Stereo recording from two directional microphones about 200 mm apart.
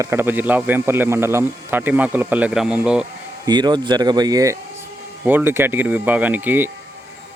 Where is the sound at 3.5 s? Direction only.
20° right (ahead or behind).